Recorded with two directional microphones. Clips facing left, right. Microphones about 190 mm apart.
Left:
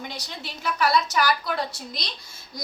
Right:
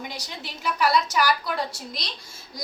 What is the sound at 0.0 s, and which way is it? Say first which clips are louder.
A woman's voice: even; 10° right (ahead or behind).